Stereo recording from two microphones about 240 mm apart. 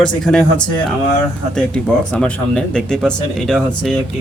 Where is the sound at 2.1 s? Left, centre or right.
Centre.